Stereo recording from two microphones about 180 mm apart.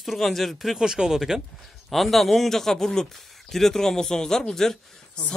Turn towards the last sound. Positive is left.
turn(degrees=5)  # may be behind; listen again after turning